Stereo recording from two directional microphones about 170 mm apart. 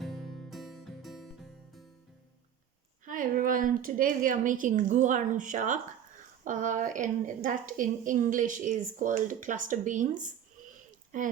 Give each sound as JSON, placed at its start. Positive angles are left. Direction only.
{"t": 0.0, "sound": "music", "side_deg": 0}
{"t": 3.1, "sound": "a woman's voice", "side_deg": -50}